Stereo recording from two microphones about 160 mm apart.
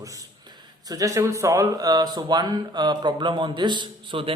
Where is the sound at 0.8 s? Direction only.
20° right (ahead or behind).